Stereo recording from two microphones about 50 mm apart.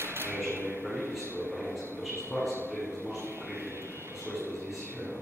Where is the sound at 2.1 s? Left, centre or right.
Left.